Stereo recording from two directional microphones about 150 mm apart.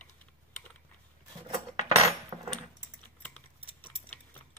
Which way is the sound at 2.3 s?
25° right (ahead or behind).